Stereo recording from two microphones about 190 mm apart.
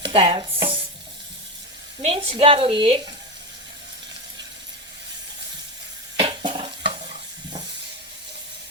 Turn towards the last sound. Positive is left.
turn(degrees=-25)  # may be behind; listen again after turning